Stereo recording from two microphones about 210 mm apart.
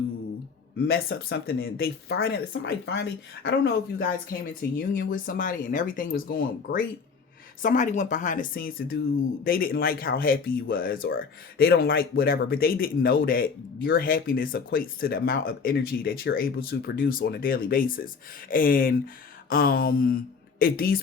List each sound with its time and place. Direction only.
0.8 s speech: 45° left (ahead or behind)
1.6 s speech: 60° left (ahead or behind)